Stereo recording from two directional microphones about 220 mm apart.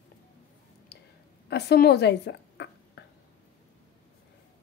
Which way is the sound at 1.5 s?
45° left (ahead or behind).